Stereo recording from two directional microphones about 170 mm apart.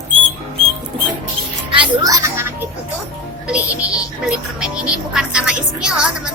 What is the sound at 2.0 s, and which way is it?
Music, 20° right (ahead or behind).